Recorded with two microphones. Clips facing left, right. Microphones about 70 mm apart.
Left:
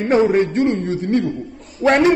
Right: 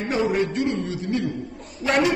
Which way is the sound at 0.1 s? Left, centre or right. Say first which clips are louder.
Left 8 dB; left.